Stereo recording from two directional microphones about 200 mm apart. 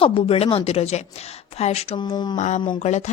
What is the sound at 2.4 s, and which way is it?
Speech, 35° left (ahead or behind).